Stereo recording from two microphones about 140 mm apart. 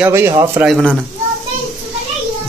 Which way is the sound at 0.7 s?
5° left (ahead or behind).